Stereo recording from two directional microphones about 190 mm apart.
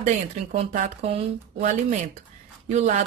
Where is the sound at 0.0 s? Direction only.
35° right (ahead or behind).